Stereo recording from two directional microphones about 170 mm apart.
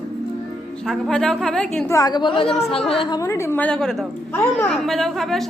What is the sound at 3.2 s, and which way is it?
A woman's voice, 15° left (ahead or behind).